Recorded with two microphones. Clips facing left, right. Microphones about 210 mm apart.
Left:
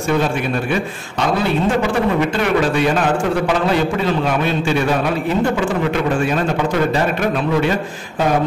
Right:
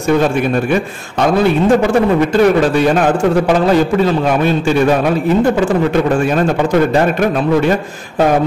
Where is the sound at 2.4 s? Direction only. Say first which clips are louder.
Right 7 dB; 40° right (ahead or behind).